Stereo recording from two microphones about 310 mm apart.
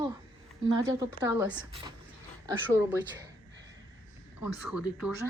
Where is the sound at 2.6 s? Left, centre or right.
Centre.